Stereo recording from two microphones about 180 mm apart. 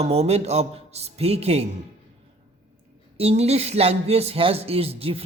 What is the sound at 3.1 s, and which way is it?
Speech, 35° right (ahead or behind).